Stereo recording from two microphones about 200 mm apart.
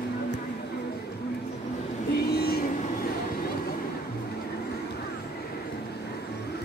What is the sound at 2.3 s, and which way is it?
Train, 50° left (ahead or behind).